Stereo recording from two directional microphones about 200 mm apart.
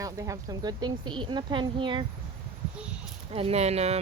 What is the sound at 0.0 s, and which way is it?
Speech, 15° right (ahead or behind).